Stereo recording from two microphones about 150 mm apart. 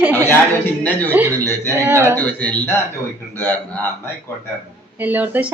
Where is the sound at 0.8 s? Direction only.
10° left (ahead or behind).